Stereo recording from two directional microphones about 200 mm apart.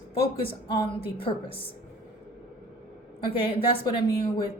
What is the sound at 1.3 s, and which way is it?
Speech, 25° left (ahead or behind).